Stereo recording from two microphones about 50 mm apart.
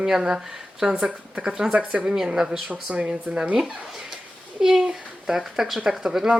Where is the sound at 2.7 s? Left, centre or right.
Right.